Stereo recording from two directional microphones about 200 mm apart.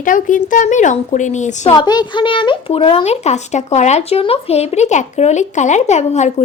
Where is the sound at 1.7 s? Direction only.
20° left (ahead or behind).